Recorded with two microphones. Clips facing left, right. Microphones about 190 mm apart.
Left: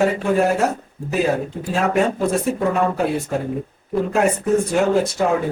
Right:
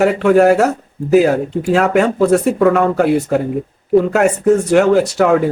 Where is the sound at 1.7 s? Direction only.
70° right (ahead or behind).